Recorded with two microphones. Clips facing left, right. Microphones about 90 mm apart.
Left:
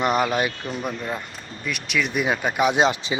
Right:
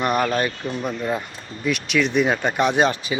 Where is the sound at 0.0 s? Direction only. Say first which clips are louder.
Even; 15° left (ahead or behind).